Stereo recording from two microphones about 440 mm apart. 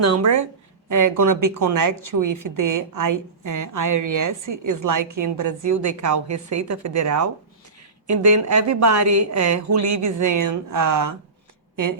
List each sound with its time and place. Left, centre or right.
0.0 s speech: right